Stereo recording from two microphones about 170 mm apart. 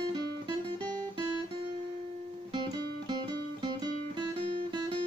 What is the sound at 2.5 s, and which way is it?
Music, 25° right (ahead or behind).